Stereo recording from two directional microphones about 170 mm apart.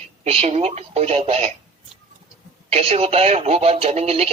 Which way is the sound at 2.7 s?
35° right (ahead or behind).